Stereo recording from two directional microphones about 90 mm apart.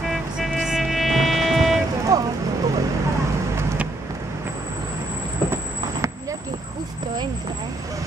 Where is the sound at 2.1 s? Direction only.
40° right (ahead or behind).